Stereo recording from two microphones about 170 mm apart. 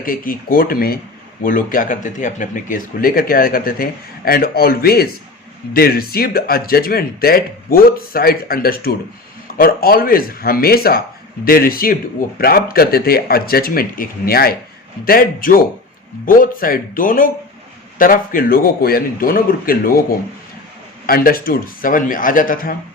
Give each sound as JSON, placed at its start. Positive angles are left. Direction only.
{"t": 0.0, "sound": "speech", "side_deg": 55}
{"t": 21.1, "sound": "speech", "side_deg": 60}